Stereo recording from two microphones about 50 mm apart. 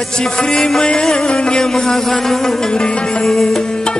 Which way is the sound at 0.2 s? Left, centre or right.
Centre.